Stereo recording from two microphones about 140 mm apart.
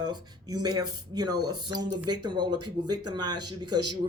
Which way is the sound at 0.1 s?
30° right (ahead or behind).